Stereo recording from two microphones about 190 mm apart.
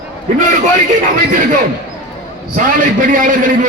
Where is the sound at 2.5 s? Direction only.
45° right (ahead or behind).